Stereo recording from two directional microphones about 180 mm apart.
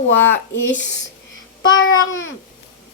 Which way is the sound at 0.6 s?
90° left.